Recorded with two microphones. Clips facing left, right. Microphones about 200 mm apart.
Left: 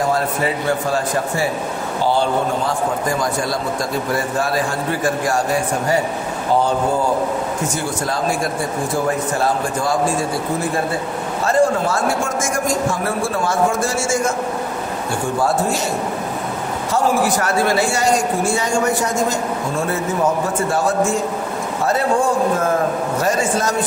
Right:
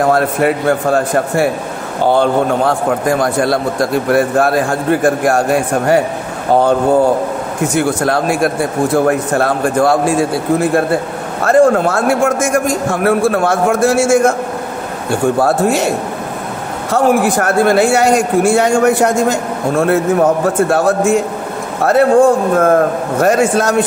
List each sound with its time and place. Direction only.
0.0 s a man's voice: 60° right (ahead or behind)
16.9 s a man's voice: 55° right (ahead or behind)